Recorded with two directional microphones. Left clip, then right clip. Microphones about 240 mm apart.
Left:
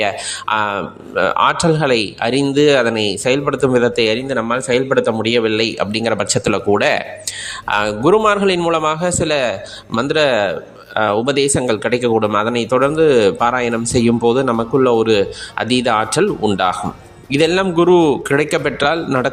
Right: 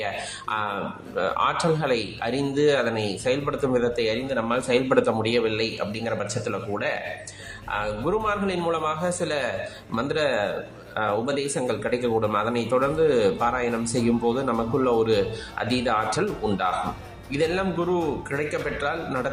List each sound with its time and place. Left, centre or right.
0.0 s speech: left